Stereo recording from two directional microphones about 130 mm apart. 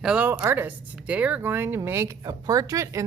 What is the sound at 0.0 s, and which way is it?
Speech, 5° right (ahead or behind).